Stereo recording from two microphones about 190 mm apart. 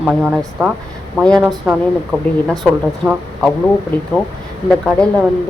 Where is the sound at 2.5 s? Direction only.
Centre (ahead or behind).